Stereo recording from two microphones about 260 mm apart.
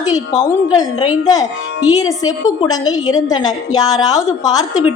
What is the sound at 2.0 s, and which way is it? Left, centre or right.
A woman's voice, centre.